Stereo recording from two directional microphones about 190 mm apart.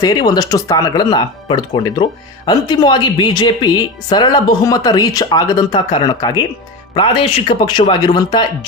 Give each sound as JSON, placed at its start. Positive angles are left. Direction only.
{"t": 0.0, "sound": "a woman's voice", "side_deg": 20}